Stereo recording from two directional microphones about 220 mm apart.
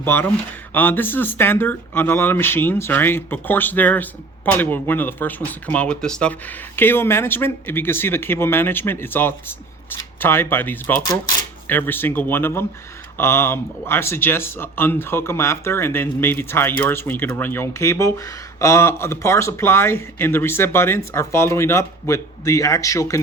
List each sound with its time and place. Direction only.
0.0 s speech: 10° left (ahead or behind)